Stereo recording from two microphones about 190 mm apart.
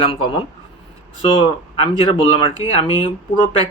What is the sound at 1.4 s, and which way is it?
Speech, 25° left (ahead or behind).